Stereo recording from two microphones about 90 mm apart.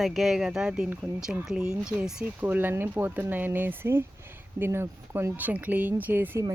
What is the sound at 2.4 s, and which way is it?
Speech, 20° right (ahead or behind).